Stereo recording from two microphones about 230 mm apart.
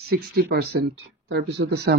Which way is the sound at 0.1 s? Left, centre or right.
Right.